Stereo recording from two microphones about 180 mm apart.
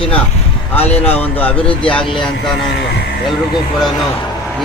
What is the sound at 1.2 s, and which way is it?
Speech, 10° left (ahead or behind).